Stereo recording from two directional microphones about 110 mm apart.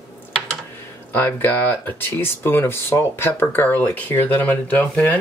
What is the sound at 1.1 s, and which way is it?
Speech, 15° left (ahead or behind).